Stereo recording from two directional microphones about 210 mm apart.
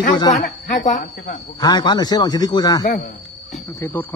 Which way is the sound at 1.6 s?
20° left (ahead or behind).